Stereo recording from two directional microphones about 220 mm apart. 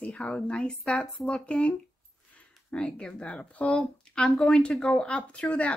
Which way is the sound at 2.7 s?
5° left (ahead or behind).